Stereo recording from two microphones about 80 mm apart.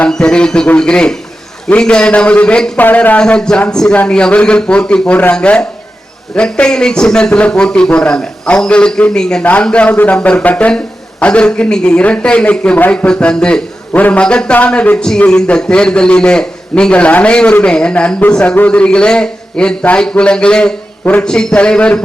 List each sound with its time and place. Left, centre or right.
0.0 s a man's voice: centre
21.2 s speech: centre